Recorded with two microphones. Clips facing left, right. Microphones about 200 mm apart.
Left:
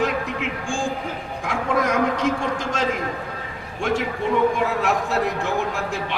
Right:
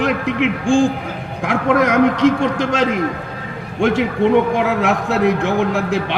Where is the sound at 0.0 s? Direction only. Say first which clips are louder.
Right 6 dB; 75° right (ahead or behind).